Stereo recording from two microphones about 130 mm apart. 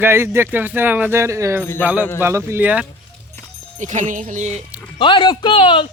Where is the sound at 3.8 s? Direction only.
70° right (ahead or behind).